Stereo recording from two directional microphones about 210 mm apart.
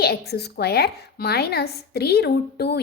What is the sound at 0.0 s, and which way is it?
A woman's voice, 50° left (ahead or behind).